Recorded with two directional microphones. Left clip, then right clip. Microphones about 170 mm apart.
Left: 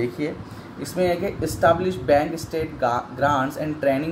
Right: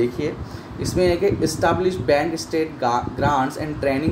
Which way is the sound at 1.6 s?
15° right (ahead or behind).